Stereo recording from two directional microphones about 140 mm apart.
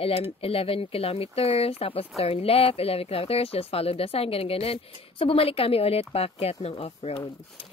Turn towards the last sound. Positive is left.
turn(degrees=45)  # may be behind; listen again after turning